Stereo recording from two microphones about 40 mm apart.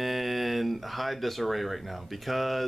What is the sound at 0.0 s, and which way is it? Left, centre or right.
Speech, centre.